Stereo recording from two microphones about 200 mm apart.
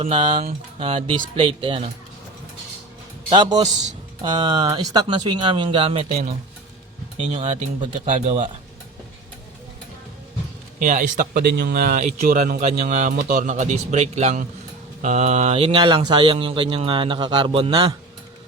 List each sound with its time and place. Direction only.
0.0 s speech: 25° right (ahead or behind)
3.2 s a man's voice: 25° right (ahead or behind); by 8.4 s 40° right (ahead or behind)
10.8 s a man's voice: 40° right (ahead or behind); by 17.9 s 25° right (ahead or behind)